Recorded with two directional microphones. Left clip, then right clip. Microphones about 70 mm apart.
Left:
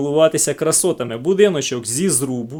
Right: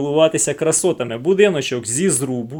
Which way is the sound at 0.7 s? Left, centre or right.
Left.